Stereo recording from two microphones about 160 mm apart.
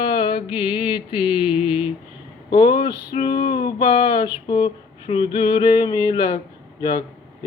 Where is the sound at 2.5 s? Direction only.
30° left (ahead or behind).